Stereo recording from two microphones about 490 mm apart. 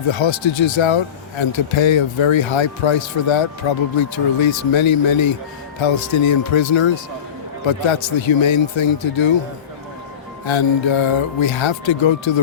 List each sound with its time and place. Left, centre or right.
0.0 s speech: left
7.6 s speech: left
10.4 s speech: left